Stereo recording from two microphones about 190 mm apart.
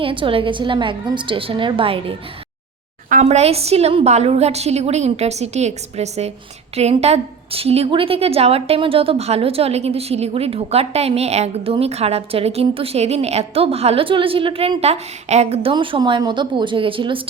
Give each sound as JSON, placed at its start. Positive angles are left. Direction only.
{"t": 0.0, "sound": "a woman's voice", "side_deg": -25}